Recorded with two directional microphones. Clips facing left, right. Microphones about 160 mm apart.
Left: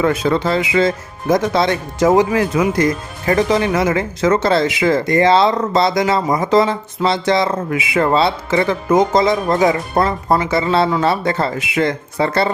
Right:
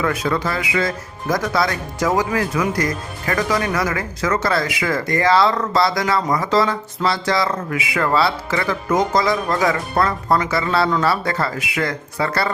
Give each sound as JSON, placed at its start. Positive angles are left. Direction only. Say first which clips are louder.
{"t": 0.0, "sound": "speech", "louder": "left 5 dB", "side_deg": 25}